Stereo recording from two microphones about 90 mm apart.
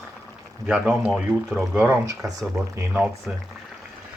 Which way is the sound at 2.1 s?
40° right (ahead or behind).